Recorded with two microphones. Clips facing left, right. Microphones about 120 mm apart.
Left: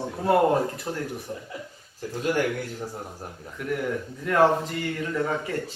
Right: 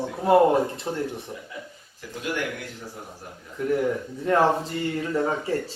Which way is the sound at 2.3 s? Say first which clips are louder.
Left 4 dB; 45° left (ahead or behind).